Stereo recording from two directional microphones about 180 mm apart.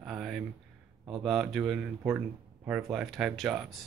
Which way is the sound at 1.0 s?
Centre (ahead or behind).